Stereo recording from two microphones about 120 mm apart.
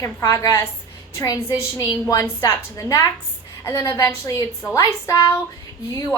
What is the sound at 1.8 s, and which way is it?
A woman's voice, 30° left (ahead or behind).